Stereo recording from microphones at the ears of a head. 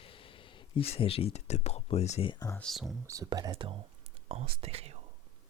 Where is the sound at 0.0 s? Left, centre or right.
Left.